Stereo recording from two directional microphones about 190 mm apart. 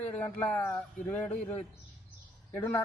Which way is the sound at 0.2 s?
10° left (ahead or behind).